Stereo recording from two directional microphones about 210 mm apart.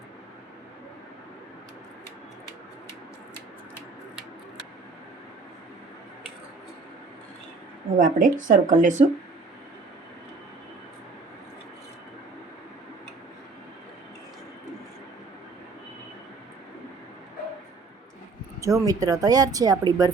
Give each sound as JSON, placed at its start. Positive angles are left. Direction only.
{"t": 7.9, "sound": "speech", "side_deg": -40}
{"t": 18.6, "sound": "speech", "side_deg": -15}